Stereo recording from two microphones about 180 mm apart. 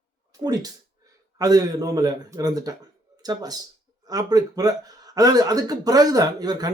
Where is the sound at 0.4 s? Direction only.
20° right (ahead or behind).